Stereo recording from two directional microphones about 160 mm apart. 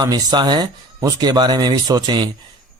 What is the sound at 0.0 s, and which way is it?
Speech, 25° right (ahead or behind).